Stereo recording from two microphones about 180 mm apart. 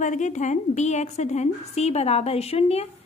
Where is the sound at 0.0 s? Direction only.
45° left (ahead or behind).